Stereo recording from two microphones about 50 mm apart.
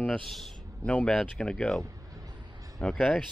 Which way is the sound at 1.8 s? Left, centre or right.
Right.